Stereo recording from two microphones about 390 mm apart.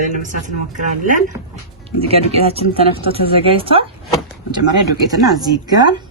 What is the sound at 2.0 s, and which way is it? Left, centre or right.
Speech, centre.